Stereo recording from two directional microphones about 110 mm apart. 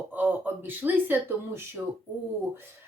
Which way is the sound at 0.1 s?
15° right (ahead or behind).